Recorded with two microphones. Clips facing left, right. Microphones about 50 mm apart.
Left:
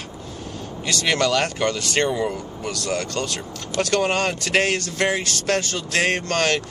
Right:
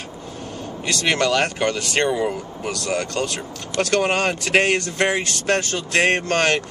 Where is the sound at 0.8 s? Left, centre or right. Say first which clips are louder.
Right 1 dB; centre.